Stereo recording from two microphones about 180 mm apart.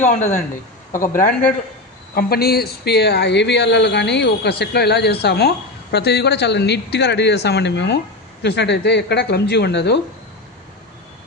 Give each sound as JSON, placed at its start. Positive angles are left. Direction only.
{"t": 0.0, "sound": "speech", "side_deg": 40}